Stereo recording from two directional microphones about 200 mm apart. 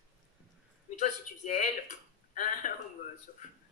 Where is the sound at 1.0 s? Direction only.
35° left (ahead or behind).